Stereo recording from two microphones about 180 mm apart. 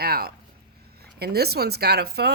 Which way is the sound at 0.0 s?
60° right (ahead or behind).